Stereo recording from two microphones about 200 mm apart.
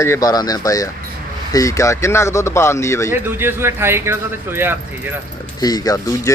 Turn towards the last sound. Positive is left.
turn(degrees=20)  # may be behind; listen again after turning